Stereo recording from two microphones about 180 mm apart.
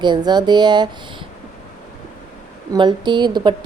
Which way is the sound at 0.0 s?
25° right (ahead or behind).